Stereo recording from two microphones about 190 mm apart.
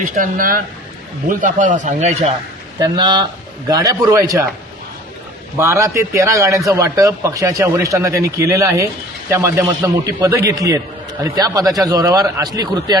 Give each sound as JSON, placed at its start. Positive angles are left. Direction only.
{"t": 0.0, "sound": "a man's voice", "side_deg": -45}
{"t": 2.7, "sound": "speech", "side_deg": -20}
{"t": 5.5, "sound": "speech", "side_deg": -15}